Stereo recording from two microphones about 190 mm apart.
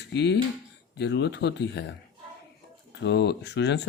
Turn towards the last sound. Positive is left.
turn(degrees=65)  # may be behind; listen again after turning